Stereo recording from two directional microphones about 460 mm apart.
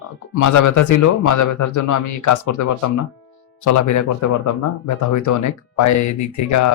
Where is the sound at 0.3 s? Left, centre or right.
Left.